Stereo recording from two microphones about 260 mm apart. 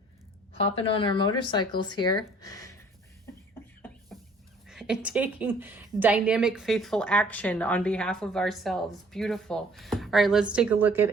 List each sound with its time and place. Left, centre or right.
0.5 s speech: left
4.7 s a woman's voice: centre